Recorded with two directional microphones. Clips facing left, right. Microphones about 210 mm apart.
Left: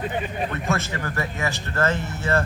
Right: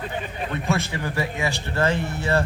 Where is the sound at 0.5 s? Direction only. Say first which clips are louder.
Right 5 dB; 15° right (ahead or behind).